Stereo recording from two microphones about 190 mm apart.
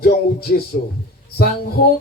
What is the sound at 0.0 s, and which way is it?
Speech, 50° left (ahead or behind).